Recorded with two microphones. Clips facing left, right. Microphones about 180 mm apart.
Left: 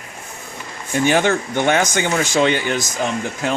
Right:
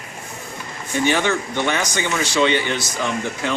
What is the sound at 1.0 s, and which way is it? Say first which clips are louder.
Speech: left 3 dB; 50° left (ahead or behind).